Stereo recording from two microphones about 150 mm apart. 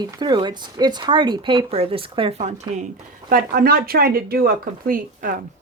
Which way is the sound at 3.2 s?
70° right (ahead or behind).